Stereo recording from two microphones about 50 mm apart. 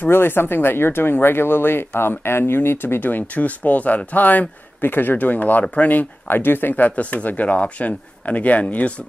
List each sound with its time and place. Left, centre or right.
0.1 s speech: left
3.0 s speech: left
6.2 s speech: left